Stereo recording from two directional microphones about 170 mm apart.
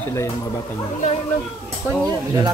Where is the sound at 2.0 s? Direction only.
25° right (ahead or behind).